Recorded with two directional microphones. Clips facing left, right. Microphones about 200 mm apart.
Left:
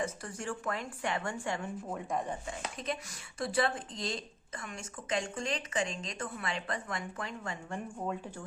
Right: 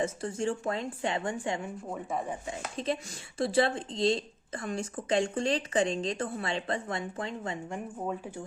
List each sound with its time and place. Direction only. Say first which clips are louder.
0.0 s speech: right 7 dB; 25° right (ahead or behind)
1.9 s chopping: right 2 dB; 5° right (ahead or behind)
2.7 s speech: right 6 dB; 30° right (ahead or behind)
7.9 s speech: right 2 dB; 5° right (ahead or behind)